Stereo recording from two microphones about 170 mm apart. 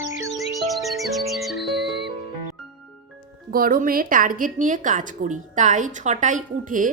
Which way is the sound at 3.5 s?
55° right (ahead or behind).